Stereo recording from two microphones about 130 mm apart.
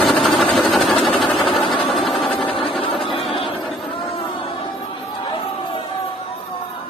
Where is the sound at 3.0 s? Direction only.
45° left (ahead or behind).